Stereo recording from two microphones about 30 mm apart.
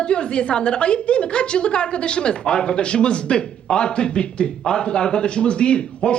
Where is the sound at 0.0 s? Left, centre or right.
Left.